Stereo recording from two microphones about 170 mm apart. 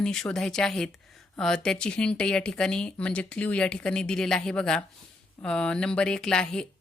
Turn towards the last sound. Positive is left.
turn(degrees=5)  # may be behind; listen again after turning